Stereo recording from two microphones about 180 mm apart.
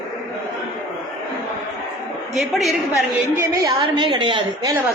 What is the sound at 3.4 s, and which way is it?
A woman's voice, 20° right (ahead or behind).